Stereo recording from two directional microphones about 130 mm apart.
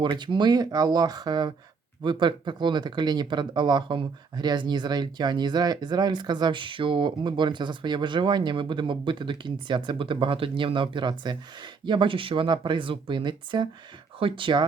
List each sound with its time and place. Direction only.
0.0 s speech: 35° right (ahead or behind)